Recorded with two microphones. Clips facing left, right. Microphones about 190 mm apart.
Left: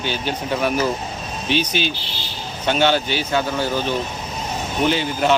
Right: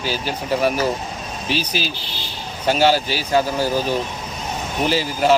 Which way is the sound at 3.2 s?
35° right (ahead or behind).